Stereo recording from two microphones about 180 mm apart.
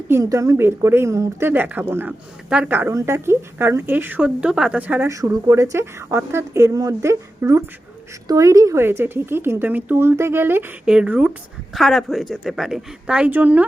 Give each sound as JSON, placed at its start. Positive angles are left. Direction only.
{"t": 0.1, "sound": "a woman's voice", "side_deg": -20}